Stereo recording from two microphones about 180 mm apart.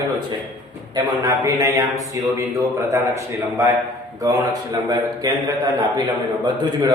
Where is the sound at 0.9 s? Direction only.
20° right (ahead or behind).